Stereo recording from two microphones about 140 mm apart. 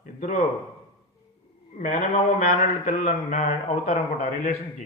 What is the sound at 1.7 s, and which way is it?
Speech, 60° left (ahead or behind).